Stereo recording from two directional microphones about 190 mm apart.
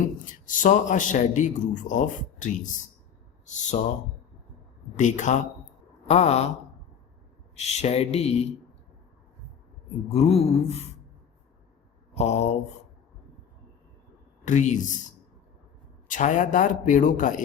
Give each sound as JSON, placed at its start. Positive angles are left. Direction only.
{"t": 0.3, "sound": "a man's voice", "side_deg": 45}
{"t": 4.9, "sound": "speech", "side_deg": 40}
{"t": 7.5, "sound": "speech", "side_deg": 35}
{"t": 10.1, "sound": "speech", "side_deg": 35}
{"t": 12.1, "sound": "speech", "side_deg": 35}
{"t": 14.4, "sound": "speech", "side_deg": 40}
{"t": 16.0, "sound": "a man's voice", "side_deg": 45}